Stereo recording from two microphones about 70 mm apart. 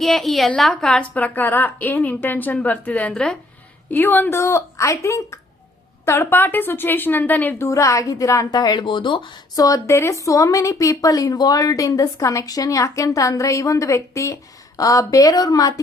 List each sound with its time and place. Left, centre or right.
0.0 s a woman's voice: centre
1.1 s a woman's voice: left
3.1 s speech: centre
3.8 s speech: left
6.1 s a woman's voice: left
7.6 s speech: left
9.3 s a woman's voice: left
9.8 s speech: left
14.8 s a woman's voice: left